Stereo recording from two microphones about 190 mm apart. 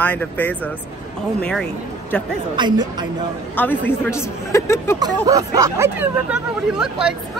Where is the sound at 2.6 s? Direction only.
20° right (ahead or behind).